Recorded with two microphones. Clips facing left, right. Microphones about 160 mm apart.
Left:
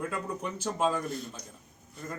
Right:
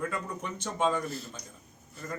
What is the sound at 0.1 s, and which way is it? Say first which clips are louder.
A man's voice: left 1 dB; 5° left (ahead or behind).